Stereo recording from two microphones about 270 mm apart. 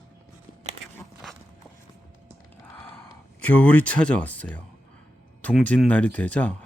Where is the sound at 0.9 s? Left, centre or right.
Centre.